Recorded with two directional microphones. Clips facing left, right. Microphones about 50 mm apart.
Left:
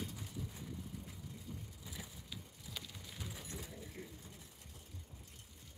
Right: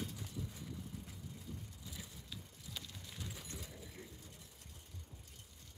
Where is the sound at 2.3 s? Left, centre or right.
Centre.